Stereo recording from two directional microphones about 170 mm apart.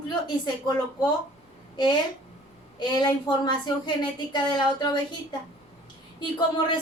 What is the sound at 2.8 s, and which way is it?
A woman's voice, 25° left (ahead or behind).